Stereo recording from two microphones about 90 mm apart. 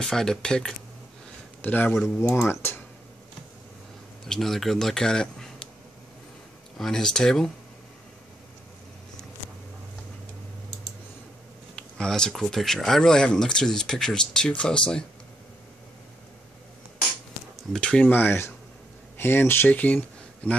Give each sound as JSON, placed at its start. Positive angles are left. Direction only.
{"t": 0.0, "sound": "speech", "side_deg": 5}
{"t": 1.6, "sound": "speech", "side_deg": 20}
{"t": 2.0, "sound": "speech", "side_deg": 5}
{"t": 2.3, "sound": "speech", "side_deg": 25}
{"t": 4.3, "sound": "speech", "side_deg": 5}
{"t": 6.8, "sound": "speech", "side_deg": 5}
{"t": 11.7, "sound": "speech", "side_deg": 10}
{"t": 17.7, "sound": "speech", "side_deg": 10}
{"t": 18.1, "sound": "speech", "side_deg": 25}